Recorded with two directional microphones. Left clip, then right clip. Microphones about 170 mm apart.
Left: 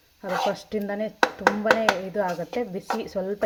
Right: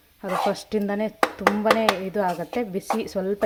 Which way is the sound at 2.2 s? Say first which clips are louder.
Right 2 dB; 20° right (ahead or behind).